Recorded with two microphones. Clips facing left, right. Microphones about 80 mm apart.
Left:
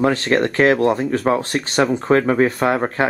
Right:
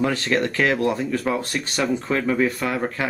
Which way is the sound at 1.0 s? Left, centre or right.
Left.